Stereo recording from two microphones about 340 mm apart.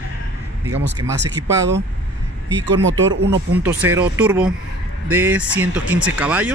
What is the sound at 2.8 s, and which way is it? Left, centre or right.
Speech, right.